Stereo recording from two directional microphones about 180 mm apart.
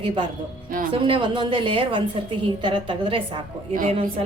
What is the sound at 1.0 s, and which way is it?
A woman's voice, 30° right (ahead or behind).